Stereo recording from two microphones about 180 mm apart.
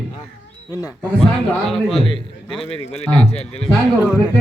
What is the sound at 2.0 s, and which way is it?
Speech, 30° left (ahead or behind).